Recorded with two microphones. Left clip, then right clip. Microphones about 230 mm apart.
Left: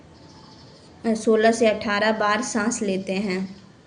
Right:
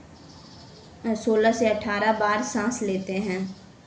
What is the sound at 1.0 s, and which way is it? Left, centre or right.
A woman's voice, left.